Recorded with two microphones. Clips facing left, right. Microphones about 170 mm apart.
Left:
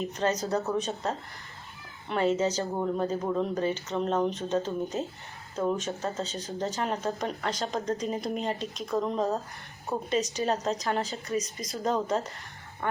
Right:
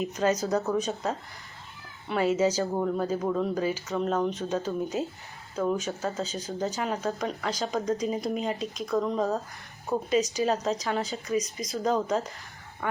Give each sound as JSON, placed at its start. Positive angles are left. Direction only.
{"t": 0.0, "sound": "speech", "side_deg": -5}
{"t": 11.0, "sound": "speech", "side_deg": 35}
{"t": 11.4, "sound": "speech", "side_deg": 0}